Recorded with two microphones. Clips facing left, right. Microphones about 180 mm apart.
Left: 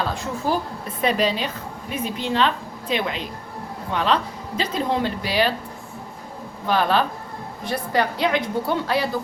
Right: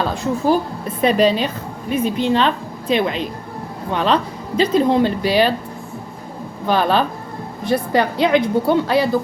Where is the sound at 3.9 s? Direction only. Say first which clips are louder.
Right 4 dB; 20° right (ahead or behind).